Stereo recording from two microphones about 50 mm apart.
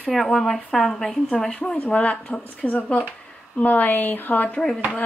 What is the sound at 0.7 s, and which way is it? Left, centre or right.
A woman's voice, centre.